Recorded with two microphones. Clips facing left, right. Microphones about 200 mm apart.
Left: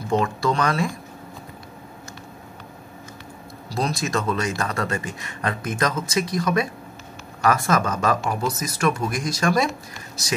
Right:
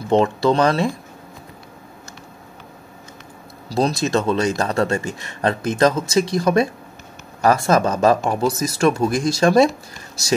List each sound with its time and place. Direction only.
0.1 s speech: 25° right (ahead or behind)
3.7 s speech: 35° right (ahead or behind)